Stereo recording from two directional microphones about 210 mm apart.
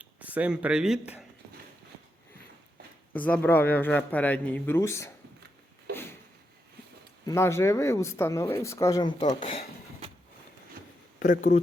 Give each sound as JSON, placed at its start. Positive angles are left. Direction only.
{"t": 0.0, "sound": "speech", "side_deg": -5}
{"t": 3.1, "sound": "speech", "side_deg": 5}
{"t": 7.3, "sound": "speech", "side_deg": 15}
{"t": 11.2, "sound": "speech", "side_deg": 40}